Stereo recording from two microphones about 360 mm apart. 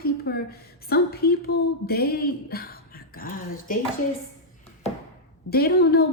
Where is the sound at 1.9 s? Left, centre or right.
Left.